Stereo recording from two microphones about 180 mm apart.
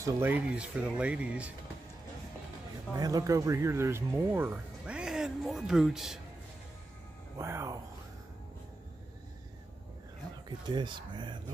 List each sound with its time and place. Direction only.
0.0 s speech: 10° right (ahead or behind)
3.0 s speech: 20° right (ahead or behind); by 6.1 s centre (ahead or behind)
7.3 s speech: 15° right (ahead or behind)
10.7 s speech: 25° right (ahead or behind)